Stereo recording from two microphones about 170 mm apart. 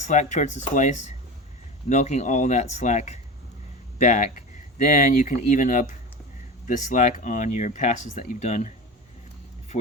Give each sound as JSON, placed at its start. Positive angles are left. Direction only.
{"t": 0.0, "sound": "speech", "side_deg": 45}